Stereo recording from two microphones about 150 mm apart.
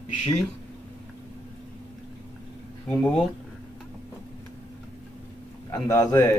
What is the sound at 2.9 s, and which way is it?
Speech, 5° left (ahead or behind).